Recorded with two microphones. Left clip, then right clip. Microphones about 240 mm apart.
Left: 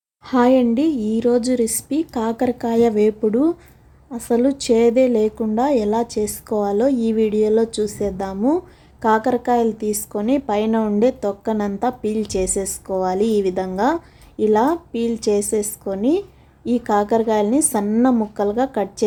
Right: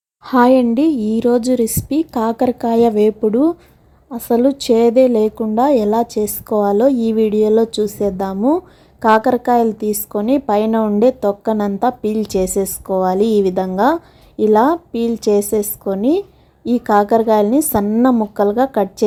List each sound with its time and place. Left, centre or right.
0.3 s a woman's voice: centre